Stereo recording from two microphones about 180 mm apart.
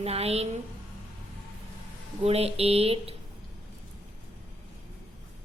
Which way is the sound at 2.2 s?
35° right (ahead or behind).